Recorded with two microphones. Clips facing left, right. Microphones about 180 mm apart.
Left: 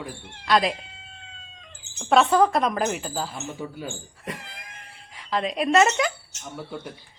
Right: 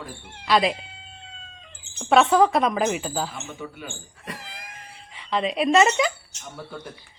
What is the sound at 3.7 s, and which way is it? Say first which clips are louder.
Speech: left 4 dB; 25° left (ahead or behind).